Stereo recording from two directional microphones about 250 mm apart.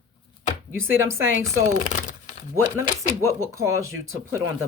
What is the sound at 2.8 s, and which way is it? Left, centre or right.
Speech, centre.